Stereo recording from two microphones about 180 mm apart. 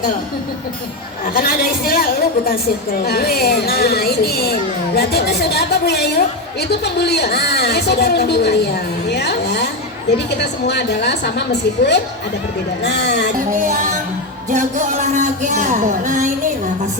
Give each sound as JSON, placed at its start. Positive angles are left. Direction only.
{"t": 1.3, "sound": "a woman's voice", "side_deg": 55}
{"t": 13.6, "sound": "speech", "side_deg": -45}